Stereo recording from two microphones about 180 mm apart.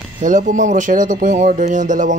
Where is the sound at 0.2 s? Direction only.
45° right (ahead or behind).